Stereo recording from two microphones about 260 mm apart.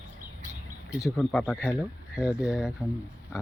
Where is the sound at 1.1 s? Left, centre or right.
Centre.